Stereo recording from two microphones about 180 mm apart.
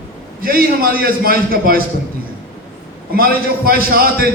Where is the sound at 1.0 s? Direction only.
55° right (ahead or behind).